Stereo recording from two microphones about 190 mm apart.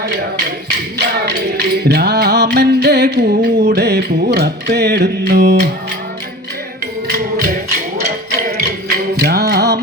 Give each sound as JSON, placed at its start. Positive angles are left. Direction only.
{"t": 0.9, "sound": "music", "side_deg": -60}
{"t": 7.9, "sound": "music", "side_deg": -55}